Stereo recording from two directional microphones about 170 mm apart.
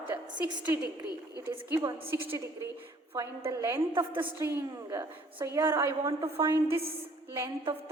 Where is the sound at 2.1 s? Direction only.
15° right (ahead or behind).